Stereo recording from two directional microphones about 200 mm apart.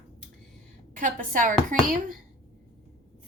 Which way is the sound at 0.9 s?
40° right (ahead or behind).